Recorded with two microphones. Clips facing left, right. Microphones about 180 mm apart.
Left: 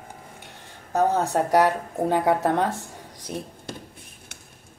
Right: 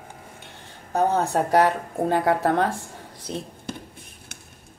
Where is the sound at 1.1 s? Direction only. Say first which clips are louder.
Right 2 dB; 15° left (ahead or behind).